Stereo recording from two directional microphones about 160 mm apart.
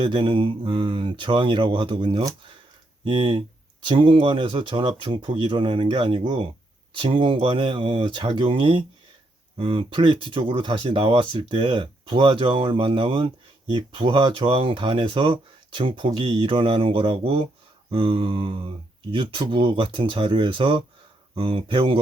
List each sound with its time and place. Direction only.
0.0 s speech: 30° right (ahead or behind)